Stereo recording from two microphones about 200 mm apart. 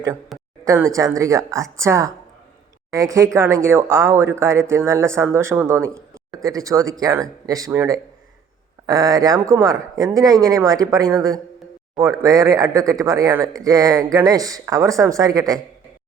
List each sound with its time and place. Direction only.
0.6 s speech: 15° right (ahead or behind)